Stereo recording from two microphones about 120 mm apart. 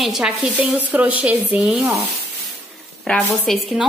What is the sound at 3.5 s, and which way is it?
Speech, centre (ahead or behind).